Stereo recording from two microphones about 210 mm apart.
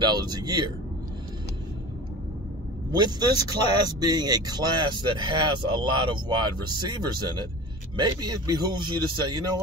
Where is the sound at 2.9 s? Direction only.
20° right (ahead or behind).